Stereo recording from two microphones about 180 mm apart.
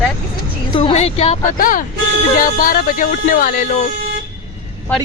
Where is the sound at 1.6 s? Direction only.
50° left (ahead or behind).